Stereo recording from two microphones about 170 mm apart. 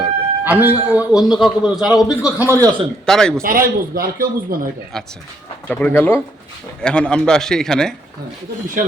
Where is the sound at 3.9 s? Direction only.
60° right (ahead or behind).